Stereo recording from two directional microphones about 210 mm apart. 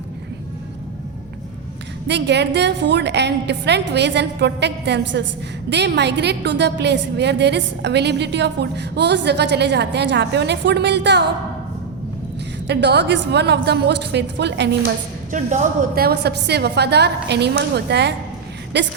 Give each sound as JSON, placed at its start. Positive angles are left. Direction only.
{"t": 2.0, "sound": "a woman's voice", "side_deg": -55}
{"t": 12.6, "sound": "a woman's voice", "side_deg": -55}
{"t": 15.3, "sound": "a woman's voice", "side_deg": -35}
{"t": 18.7, "sound": "a sound", "side_deg": -55}